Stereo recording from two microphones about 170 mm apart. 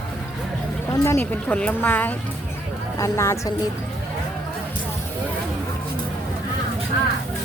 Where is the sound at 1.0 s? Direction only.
15° left (ahead or behind).